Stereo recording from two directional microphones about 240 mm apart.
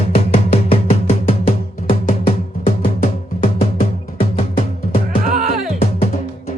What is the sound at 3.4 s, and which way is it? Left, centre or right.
Music, left.